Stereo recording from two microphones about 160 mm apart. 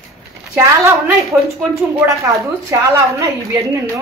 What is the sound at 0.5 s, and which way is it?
A woman's voice, 20° right (ahead or behind).